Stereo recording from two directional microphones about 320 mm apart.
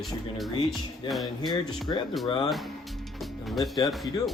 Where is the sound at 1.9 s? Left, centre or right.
Centre.